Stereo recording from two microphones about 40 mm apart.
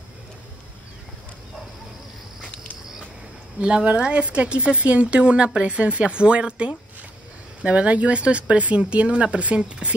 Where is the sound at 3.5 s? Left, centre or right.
Right.